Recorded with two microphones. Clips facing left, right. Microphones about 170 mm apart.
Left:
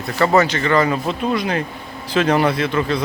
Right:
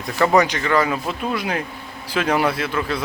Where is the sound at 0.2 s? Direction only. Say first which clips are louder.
Left 1 dB; 15° right (ahead or behind).